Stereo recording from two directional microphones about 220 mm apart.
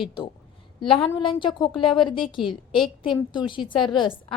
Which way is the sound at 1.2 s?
25° left (ahead or behind).